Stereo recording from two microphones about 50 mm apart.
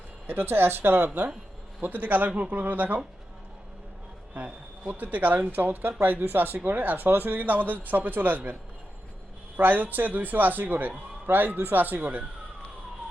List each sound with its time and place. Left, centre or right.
0.3 s a man's voice: right
4.4 s a man's voice: right
9.6 s a man's voice: right